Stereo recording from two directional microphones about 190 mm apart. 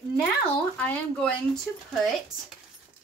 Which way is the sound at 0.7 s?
5° left (ahead or behind).